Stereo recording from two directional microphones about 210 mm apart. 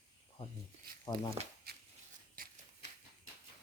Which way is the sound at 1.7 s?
50° right (ahead or behind).